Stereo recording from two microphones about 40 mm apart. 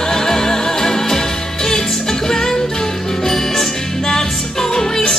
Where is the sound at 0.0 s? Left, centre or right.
Centre.